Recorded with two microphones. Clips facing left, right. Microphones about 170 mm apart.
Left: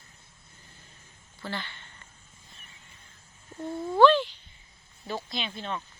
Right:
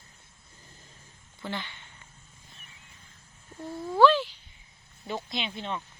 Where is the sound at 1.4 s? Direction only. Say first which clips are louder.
Even; 15° right (ahead or behind).